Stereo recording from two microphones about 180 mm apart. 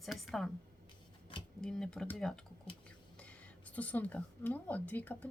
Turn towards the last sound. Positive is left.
turn(degrees=10)  # may be behind; listen again after turning